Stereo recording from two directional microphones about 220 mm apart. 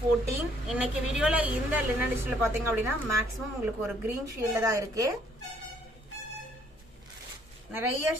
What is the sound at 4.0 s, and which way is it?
A woman's voice, 15° right (ahead or behind).